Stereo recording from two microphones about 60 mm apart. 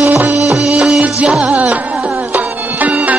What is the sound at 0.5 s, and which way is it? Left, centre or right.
Music, centre.